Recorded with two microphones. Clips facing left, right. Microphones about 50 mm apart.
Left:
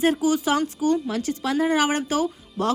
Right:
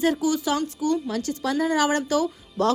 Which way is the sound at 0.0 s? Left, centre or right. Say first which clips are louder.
Left 2 dB; left.